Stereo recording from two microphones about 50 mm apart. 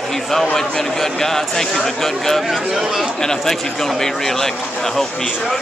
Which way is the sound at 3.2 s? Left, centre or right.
Centre.